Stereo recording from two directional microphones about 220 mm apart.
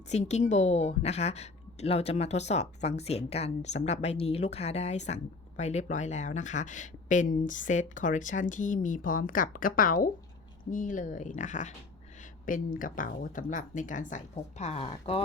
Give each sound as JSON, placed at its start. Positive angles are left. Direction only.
{"t": 0.1, "sound": "a woman's voice", "side_deg": 30}